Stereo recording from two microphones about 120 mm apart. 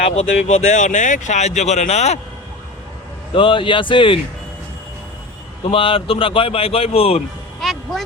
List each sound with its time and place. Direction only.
0.0 s speech: 65° left (ahead or behind)
3.3 s a man's voice: 45° left (ahead or behind)
5.7 s a man's voice: 50° left (ahead or behind)
7.6 s a sound: centre (ahead or behind)